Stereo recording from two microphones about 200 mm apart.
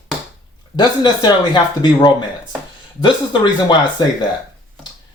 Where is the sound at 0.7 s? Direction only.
20° left (ahead or behind).